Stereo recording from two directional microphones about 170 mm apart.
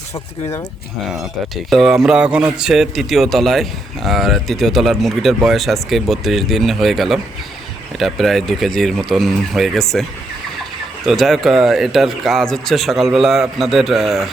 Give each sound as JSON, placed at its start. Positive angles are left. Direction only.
{"t": 0.1, "sound": "speech", "side_deg": 15}
{"t": 1.7, "sound": "speech", "side_deg": 0}